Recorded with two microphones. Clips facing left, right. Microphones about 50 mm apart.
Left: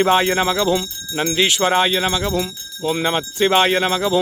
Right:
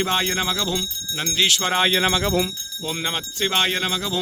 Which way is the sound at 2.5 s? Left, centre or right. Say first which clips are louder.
Left 7 dB; centre.